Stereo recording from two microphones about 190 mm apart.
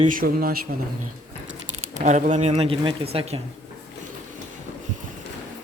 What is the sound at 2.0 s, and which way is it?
Speech, 40° right (ahead or behind).